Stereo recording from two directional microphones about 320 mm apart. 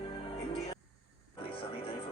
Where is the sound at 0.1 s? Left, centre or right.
Centre.